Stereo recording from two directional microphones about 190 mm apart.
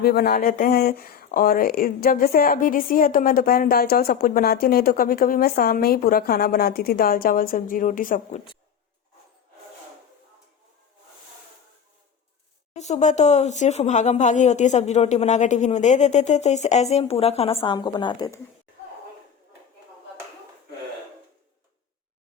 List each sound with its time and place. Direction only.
0.0 s speech: 55° left (ahead or behind)
12.7 s speech: 35° left (ahead or behind)